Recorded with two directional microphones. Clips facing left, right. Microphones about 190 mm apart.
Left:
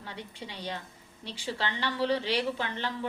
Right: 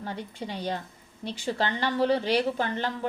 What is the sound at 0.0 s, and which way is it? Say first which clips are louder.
A woman's voice: right 7 dB; 45° right (ahead or behind).